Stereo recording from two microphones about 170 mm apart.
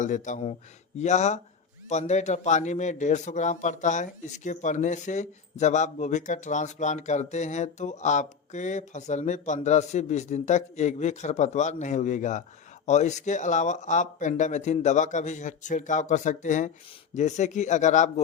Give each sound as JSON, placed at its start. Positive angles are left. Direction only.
{"t": 0.0, "sound": "a man's voice", "side_deg": 45}